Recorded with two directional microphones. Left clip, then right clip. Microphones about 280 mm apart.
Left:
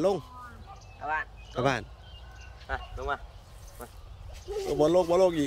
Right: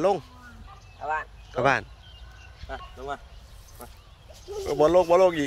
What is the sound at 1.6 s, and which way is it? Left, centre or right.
Speech, centre.